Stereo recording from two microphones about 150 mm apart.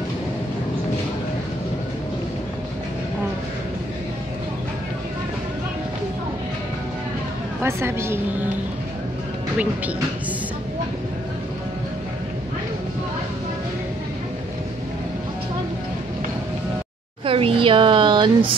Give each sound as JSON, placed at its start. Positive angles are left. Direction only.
{"t": 7.6, "sound": "a woman's voice", "side_deg": -15}
{"t": 17.2, "sound": "speech", "side_deg": -35}